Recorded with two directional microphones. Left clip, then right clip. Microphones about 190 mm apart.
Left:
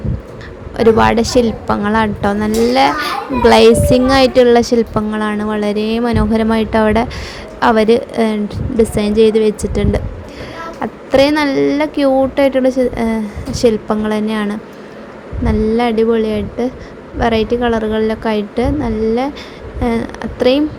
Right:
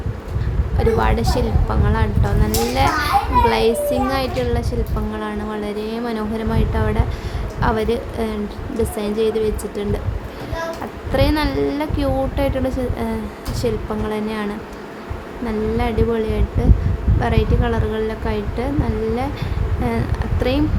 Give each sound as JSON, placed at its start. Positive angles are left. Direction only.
{"t": 0.8, "sound": "a woman's voice", "side_deg": 30}
{"t": 11.1, "sound": "a woman's voice", "side_deg": 25}
{"t": 15.4, "sound": "a woman's voice", "side_deg": 25}